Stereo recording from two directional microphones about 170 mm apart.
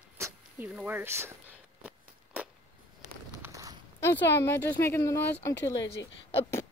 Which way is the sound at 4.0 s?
15° left (ahead or behind).